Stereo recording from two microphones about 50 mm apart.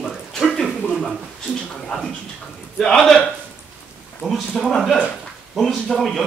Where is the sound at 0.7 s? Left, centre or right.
Centre.